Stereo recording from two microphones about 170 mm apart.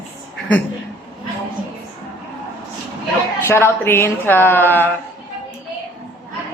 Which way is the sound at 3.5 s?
15° left (ahead or behind).